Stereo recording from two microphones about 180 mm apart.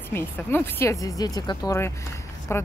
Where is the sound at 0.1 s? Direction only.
10° left (ahead or behind).